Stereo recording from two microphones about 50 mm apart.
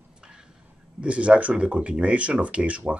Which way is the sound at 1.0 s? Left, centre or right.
Right.